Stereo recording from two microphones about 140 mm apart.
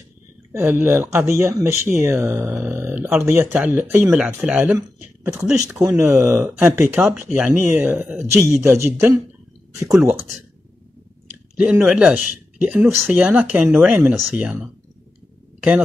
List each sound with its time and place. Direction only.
0.5 s speech: 15° right (ahead or behind)
4.7 s speech: 20° right (ahead or behind)
11.5 s speech: 10° right (ahead or behind)